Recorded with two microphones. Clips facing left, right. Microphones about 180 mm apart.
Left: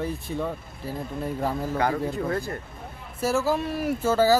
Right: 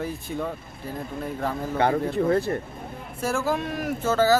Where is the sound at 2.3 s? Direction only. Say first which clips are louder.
Right 6 dB; 30° right (ahead or behind).